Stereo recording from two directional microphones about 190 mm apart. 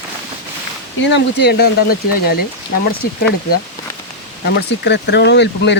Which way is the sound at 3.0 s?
50° left (ahead or behind).